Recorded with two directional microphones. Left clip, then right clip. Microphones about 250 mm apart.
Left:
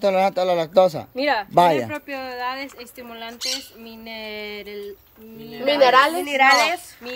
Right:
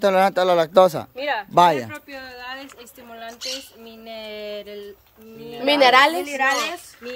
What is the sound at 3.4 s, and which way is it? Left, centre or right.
Speech, left.